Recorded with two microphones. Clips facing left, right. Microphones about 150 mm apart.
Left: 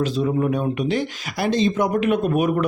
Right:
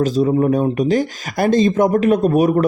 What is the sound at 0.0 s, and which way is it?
Speech, 40° right (ahead or behind).